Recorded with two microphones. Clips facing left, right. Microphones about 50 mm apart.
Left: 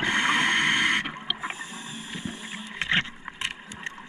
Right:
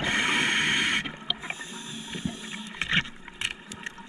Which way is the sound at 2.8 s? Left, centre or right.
Left.